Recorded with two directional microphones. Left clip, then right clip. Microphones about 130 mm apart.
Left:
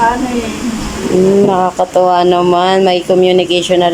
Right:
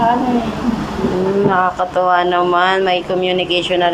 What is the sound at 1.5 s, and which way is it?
Speech, 50° left (ahead or behind).